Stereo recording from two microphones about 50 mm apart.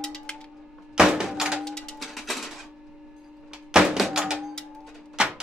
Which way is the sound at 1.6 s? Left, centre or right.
Centre.